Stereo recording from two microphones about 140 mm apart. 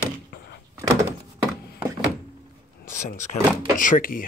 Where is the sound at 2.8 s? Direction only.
70° left (ahead or behind).